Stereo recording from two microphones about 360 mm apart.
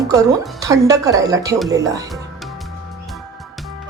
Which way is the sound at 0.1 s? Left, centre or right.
Centre.